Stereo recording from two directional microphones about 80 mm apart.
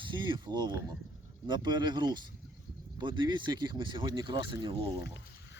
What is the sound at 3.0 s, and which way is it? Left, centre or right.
Speech, right.